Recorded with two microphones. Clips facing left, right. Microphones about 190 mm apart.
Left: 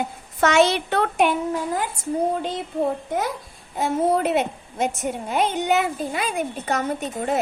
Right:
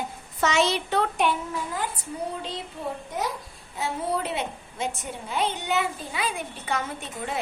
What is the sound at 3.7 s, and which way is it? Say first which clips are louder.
A woman's voice: left 8 dB; 50° left (ahead or behind).